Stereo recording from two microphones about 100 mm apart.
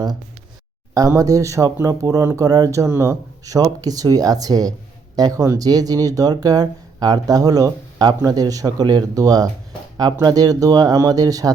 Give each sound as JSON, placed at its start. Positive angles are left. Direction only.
{"t": 0.9, "sound": "speech", "side_deg": -35}